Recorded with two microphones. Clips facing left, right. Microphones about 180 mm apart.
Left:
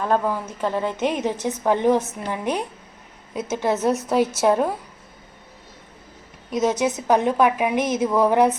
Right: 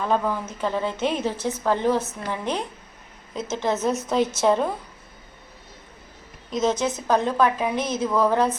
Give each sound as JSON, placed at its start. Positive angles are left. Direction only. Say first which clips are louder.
{"t": 0.0, "sound": "a woman's voice", "louder": "left 2 dB", "side_deg": 10}
{"t": 6.5, "sound": "a woman's voice", "louder": "left 2 dB", "side_deg": 15}